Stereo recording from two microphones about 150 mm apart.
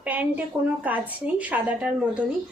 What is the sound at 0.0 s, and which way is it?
A woman's voice, 10° right (ahead or behind).